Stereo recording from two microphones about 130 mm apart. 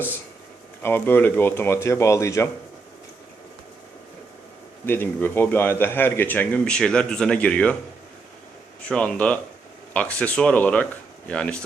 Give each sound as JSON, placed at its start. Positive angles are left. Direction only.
{"t": 0.8, "sound": "speech", "side_deg": 15}
{"t": 4.9, "sound": "speech", "side_deg": 15}
{"t": 8.9, "sound": "speech", "side_deg": 10}